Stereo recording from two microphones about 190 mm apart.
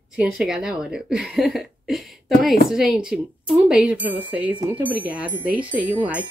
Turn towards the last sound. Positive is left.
turn(degrees=-10)  # may be behind; listen again after turning